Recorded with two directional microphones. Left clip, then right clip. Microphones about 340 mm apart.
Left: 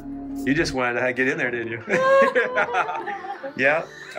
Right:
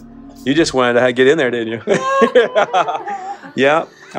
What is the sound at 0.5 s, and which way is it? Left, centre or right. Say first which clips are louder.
Speech: right 9 dB; centre.